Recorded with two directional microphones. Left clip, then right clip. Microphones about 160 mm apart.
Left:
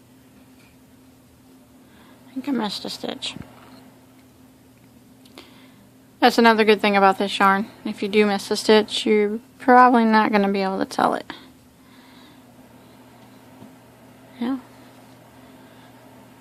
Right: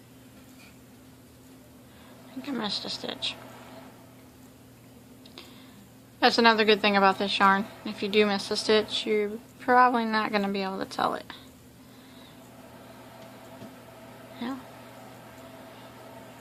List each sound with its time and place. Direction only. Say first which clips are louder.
2.4 s a woman's voice: left 6 dB; 50° left (ahead or behind)
6.1 s a woman's voice: left 5 dB; 50° left (ahead or behind)
14.4 s a sound: left 9 dB; 50° left (ahead or behind)